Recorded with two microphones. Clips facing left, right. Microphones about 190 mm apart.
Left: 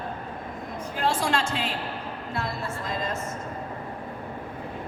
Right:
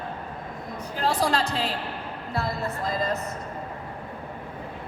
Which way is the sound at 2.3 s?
35° right (ahead or behind).